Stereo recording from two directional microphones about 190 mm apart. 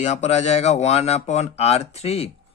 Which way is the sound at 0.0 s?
35° left (ahead or behind).